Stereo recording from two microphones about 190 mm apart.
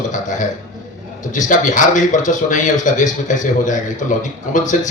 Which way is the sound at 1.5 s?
40° left (ahead or behind).